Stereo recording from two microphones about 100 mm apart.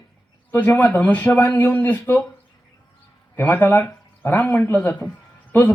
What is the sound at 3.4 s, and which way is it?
A woman's voice, 20° left (ahead or behind).